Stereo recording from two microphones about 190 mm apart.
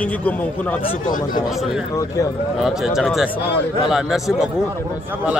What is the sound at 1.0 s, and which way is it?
Speech, 45° left (ahead or behind).